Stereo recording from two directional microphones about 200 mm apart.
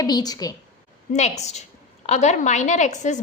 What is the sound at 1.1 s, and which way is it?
A woman's voice, 35° left (ahead or behind).